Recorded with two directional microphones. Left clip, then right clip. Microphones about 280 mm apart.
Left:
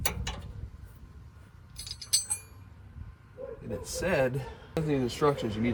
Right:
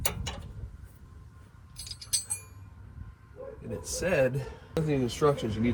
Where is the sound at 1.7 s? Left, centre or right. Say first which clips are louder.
Left 3 dB; centre.